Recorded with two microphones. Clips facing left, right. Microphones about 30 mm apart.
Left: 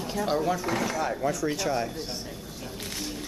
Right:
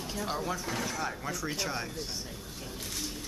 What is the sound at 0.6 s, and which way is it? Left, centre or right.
Speech, left.